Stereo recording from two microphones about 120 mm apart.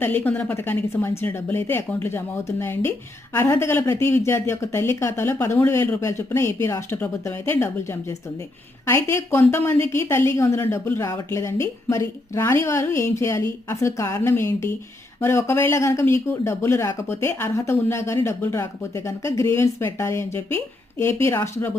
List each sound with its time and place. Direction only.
0.0 s a woman's voice: 15° left (ahead or behind)